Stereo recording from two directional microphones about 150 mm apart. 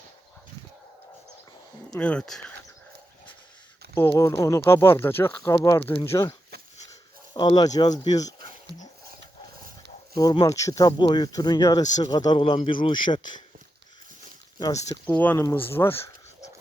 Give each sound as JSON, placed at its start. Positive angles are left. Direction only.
{"t": 2.0, "sound": "speech", "side_deg": 5}
{"t": 3.9, "sound": "speech", "side_deg": 20}
{"t": 7.3, "sound": "speech", "side_deg": 30}
{"t": 10.2, "sound": "speech", "side_deg": 25}
{"t": 14.6, "sound": "speech", "side_deg": 25}
{"t": 15.0, "sound": "speech", "side_deg": 10}